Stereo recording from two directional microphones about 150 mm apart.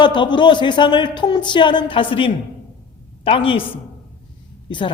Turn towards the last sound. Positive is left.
turn(degrees=30)  # may be behind; listen again after turning